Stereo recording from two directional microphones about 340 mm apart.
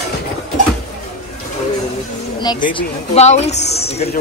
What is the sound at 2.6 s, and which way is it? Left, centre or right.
Speech, centre.